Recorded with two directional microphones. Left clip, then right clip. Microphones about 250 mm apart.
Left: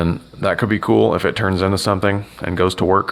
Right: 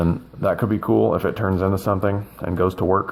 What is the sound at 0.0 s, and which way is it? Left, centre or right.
Speech, left.